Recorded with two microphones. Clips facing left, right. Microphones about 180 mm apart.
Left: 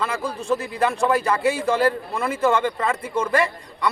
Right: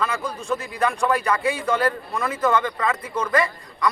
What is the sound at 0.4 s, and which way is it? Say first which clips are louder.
A man's voice: left 2 dB; 25° left (ahead or behind).